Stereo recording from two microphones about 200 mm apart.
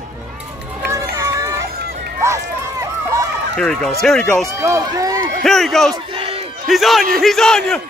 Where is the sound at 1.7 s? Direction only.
50° right (ahead or behind).